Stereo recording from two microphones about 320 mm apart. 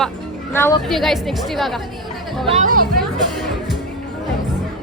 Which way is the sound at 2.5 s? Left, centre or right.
Right.